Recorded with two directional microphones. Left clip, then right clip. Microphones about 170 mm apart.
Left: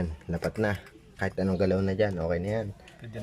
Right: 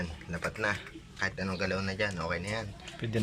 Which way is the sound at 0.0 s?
45° left (ahead or behind).